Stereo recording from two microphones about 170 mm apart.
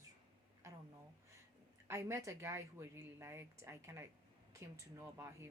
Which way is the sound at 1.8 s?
15° right (ahead or behind).